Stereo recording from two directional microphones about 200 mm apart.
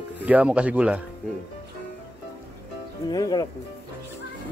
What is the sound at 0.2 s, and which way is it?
Speech, 5° right (ahead or behind).